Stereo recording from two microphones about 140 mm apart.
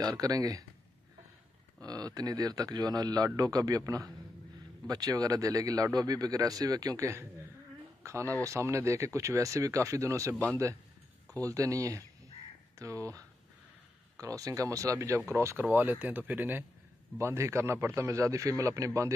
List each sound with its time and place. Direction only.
0.0 s a man's voice: 25° right (ahead or behind)
1.8 s a man's voice: 25° right (ahead or behind)
10.3 s a man's voice: 10° left (ahead or behind)
11.4 s a man's voice: 25° right (ahead or behind)